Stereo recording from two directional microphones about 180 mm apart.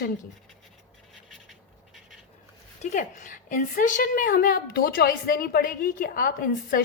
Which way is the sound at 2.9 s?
45° left (ahead or behind).